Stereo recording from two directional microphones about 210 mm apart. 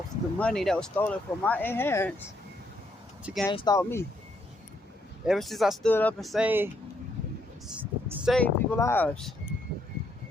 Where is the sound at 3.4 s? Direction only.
20° left (ahead or behind).